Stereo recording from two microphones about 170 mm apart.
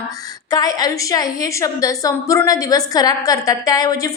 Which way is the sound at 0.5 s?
20° left (ahead or behind).